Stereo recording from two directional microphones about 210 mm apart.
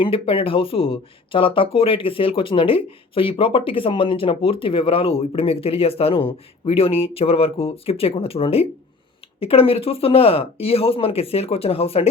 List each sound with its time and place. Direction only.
0.0 s speech: 25° left (ahead or behind)